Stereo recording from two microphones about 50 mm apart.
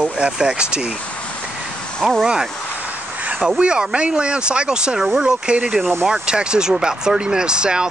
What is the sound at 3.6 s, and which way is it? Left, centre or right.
Speech, centre.